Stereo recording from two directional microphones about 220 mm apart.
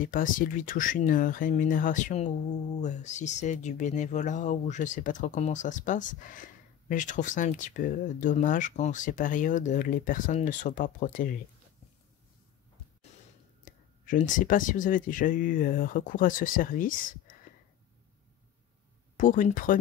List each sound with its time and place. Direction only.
0.0 s speech: 40° left (ahead or behind)
13.7 s speech: 35° left (ahead or behind)
19.1 s speech: 35° left (ahead or behind)